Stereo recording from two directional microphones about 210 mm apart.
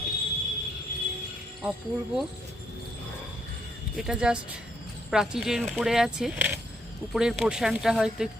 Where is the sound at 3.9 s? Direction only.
5° right (ahead or behind).